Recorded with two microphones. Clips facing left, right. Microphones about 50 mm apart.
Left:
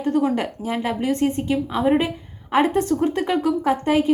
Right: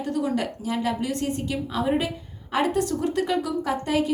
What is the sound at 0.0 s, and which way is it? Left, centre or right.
A woman's voice, left.